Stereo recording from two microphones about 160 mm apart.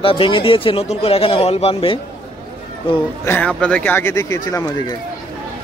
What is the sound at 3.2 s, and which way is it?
A man's voice, 15° left (ahead or behind).